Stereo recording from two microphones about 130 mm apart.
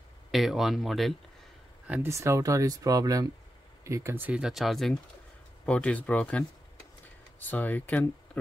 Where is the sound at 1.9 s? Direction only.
20° right (ahead or behind).